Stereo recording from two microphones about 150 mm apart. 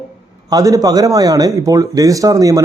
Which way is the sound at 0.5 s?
25° right (ahead or behind).